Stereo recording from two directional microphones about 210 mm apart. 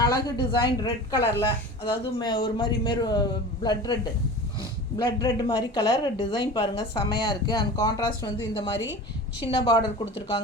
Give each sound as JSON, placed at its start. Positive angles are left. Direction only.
{"t": 0.0, "sound": "speech", "side_deg": 20}
{"t": 4.9, "sound": "speech", "side_deg": 20}